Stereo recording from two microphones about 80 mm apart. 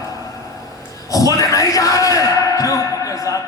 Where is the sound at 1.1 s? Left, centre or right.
Left.